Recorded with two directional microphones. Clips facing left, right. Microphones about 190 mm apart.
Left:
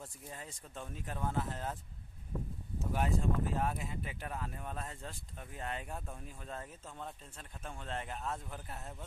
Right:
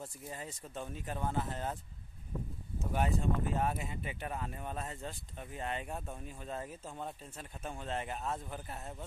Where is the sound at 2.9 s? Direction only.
Centre (ahead or behind).